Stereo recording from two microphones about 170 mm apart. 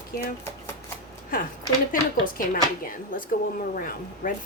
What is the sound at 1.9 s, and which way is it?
Speech, 55° left (ahead or behind).